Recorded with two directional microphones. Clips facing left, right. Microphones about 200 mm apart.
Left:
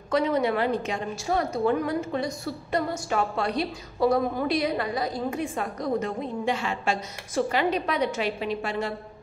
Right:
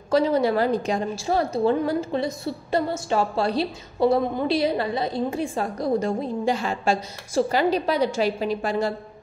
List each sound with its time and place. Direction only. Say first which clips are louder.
0.1 s a woman's voice: right 4 dB; 30° right (ahead or behind)